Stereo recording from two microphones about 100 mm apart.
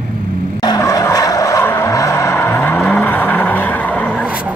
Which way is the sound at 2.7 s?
5° left (ahead or behind).